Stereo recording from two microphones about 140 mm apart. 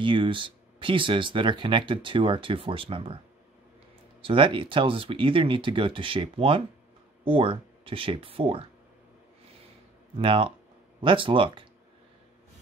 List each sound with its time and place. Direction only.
0.0 s speech: 35° right (ahead or behind)
4.2 s speech: 40° right (ahead or behind)
10.1 s speech: 40° right (ahead or behind)